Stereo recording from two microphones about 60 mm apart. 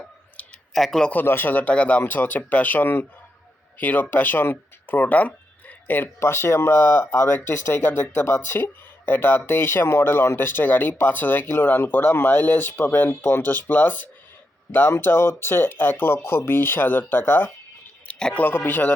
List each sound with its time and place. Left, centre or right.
0.7 s speech: centre
1.1 s speech: left
6.1 s speech: left